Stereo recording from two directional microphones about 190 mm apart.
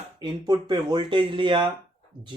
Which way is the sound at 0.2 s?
20° right (ahead or behind).